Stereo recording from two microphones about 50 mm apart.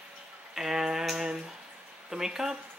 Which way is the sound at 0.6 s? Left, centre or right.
Centre.